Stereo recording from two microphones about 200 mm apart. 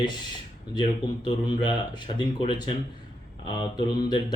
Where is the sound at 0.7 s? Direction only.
20° left (ahead or behind).